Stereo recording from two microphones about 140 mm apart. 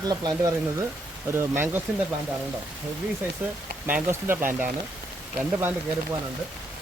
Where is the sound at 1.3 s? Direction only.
15° right (ahead or behind).